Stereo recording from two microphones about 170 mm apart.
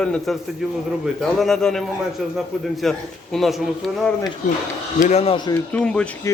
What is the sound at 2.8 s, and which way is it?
Speech, centre (ahead or behind).